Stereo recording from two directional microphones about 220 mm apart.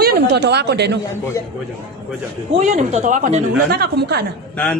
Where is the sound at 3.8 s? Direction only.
45° right (ahead or behind).